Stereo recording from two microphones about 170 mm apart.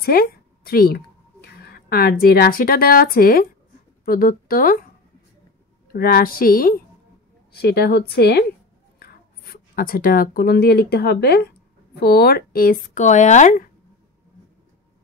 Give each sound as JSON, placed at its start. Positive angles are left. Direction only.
{"t": 0.0, "sound": "speech", "side_deg": 60}
{"t": 5.9, "sound": "a woman's voice", "side_deg": 60}
{"t": 7.5, "sound": "a woman's voice", "side_deg": 75}
{"t": 9.0, "sound": "speech", "side_deg": 60}